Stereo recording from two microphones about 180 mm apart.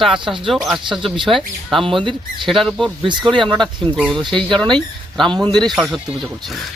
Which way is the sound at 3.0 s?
25° right (ahead or behind).